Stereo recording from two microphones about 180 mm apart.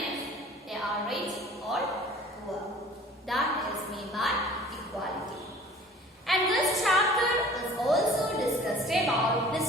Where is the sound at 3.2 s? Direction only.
Centre (ahead or behind).